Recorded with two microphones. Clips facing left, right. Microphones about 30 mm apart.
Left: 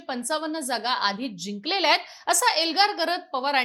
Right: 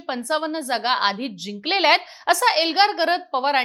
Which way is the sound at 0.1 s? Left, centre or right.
Right.